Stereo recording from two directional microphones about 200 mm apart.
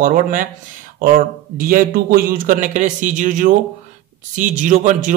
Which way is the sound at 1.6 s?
45° right (ahead or behind).